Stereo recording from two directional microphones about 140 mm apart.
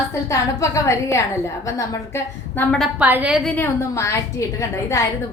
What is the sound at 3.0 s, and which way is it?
Speech, 10° right (ahead or behind).